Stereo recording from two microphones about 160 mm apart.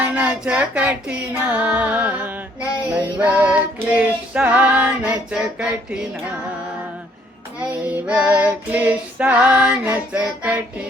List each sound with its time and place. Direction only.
0.0 s female singing: 10° right (ahead or behind)
7.6 s female singing: 10° right (ahead or behind)